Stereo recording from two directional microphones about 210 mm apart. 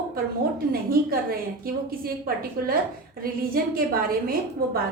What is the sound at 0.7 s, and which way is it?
A woman's voice, 45° right (ahead or behind).